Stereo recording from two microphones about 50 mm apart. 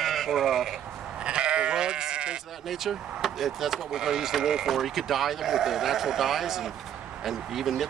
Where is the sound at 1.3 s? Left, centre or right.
Centre.